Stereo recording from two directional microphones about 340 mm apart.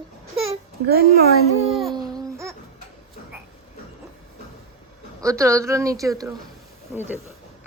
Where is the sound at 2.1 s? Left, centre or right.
Centre.